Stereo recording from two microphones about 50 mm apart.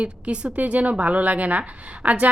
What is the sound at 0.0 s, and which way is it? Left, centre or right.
A woman's voice, right.